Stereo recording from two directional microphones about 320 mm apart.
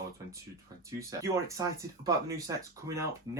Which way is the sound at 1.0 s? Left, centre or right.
Centre.